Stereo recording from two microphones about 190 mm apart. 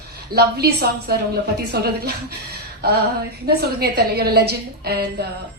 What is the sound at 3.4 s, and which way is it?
A woman's voice, 55° right (ahead or behind).